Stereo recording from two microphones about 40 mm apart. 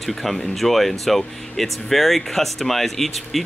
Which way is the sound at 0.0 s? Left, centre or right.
Centre.